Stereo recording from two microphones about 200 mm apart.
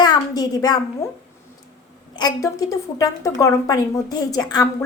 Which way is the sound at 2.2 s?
20° left (ahead or behind).